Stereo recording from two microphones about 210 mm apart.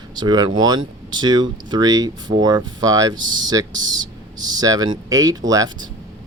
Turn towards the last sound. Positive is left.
turn(degrees=-15)  # may be behind; listen again after turning